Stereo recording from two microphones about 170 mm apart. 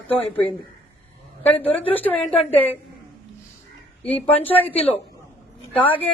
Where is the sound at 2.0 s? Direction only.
10° left (ahead or behind).